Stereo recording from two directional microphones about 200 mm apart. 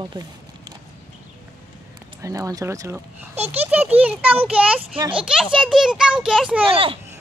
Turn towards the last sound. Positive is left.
turn(degrees=-25)  # may be behind; listen again after turning